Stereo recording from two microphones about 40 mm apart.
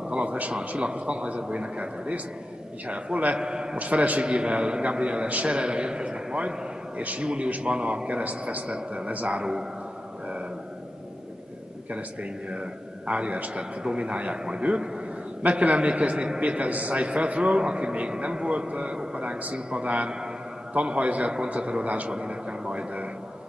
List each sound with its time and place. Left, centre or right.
0.1 s a man's voice: right
3.3 s a man's voice: right
3.7 s a man's voice: right
4.2 s a man's voice: right
7.0 s a man's voice: right
9.4 s a man's voice: right
11.9 s a man's voice: right
22.1 s a man's voice: right